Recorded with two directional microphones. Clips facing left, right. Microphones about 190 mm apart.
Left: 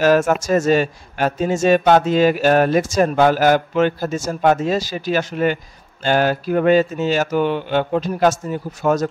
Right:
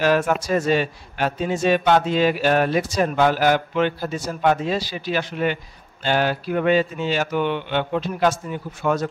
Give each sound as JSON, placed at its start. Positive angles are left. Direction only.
{"t": 0.0, "sound": "a man's voice", "side_deg": 45}